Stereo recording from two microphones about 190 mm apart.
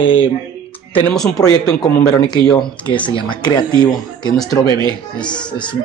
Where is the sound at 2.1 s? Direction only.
20° left (ahead or behind).